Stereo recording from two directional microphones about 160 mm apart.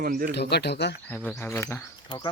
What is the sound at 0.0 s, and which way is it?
Speech, 65° right (ahead or behind).